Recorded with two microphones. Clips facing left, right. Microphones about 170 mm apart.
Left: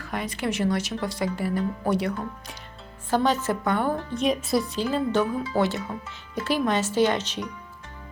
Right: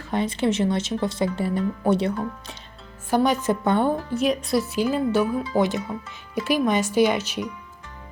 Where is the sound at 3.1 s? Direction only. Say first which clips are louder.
Right 3 dB; 10° right (ahead or behind).